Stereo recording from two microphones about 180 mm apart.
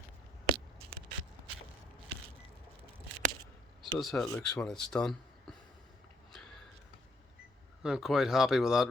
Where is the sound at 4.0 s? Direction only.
Centre (ahead or behind).